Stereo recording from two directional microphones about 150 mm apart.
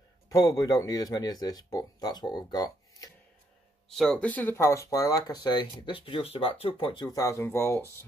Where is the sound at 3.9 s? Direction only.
5° left (ahead or behind).